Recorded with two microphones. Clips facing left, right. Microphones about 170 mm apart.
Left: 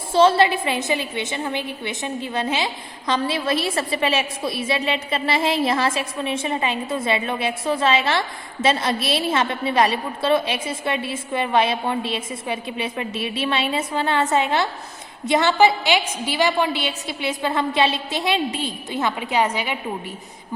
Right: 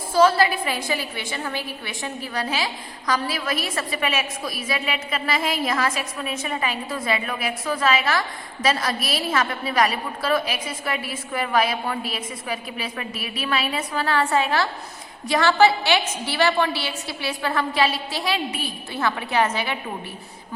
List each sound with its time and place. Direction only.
0.1 s a woman's voice: 25° left (ahead or behind)